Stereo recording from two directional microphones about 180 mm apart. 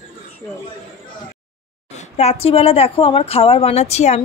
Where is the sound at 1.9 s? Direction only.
35° left (ahead or behind).